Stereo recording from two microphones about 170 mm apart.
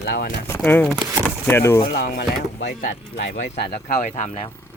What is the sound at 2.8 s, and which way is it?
Speech, 50° left (ahead or behind).